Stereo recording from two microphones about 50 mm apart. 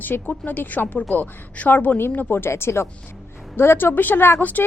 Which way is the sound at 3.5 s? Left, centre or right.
Left.